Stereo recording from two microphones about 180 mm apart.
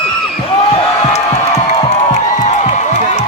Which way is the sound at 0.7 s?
40° left (ahead or behind).